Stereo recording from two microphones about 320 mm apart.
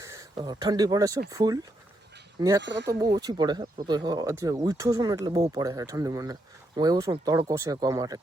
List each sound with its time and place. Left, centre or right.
0.0 s speech: centre
2.6 s speech: right
2.8 s speech: centre